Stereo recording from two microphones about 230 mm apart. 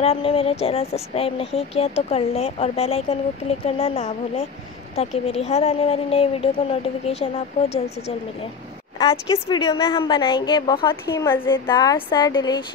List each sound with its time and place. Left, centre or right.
0.0 s speech: left
9.1 s a woman's voice: centre